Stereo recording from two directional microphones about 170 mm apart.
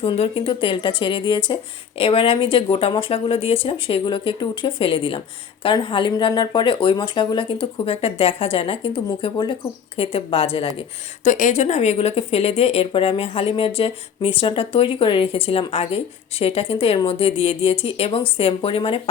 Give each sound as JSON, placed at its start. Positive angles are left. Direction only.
{"t": 0.0, "sound": "a woman's voice", "side_deg": 35}
{"t": 11.2, "sound": "a woman's voice", "side_deg": 50}